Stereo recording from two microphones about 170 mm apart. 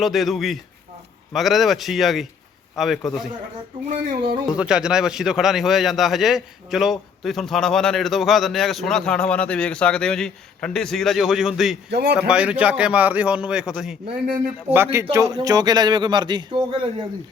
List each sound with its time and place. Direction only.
0.0 s a man's voice: centre (ahead or behind)
4.5 s a man's voice: 5° right (ahead or behind)
11.9 s a man's voice: 80° right
12.3 s a man's voice: 5° right (ahead or behind); by 17.1 s 30° right (ahead or behind)